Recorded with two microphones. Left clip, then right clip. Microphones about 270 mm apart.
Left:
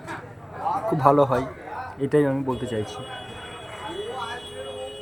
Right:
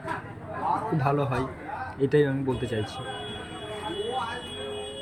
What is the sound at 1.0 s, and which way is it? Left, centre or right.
Speech, centre.